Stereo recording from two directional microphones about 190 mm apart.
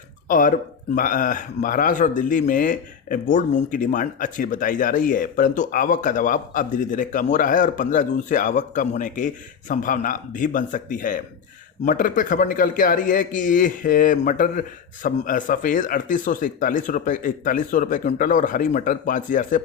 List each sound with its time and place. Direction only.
0.3 s speech: 45° left (ahead or behind)